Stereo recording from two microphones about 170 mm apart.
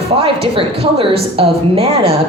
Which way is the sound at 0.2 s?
35° right (ahead or behind).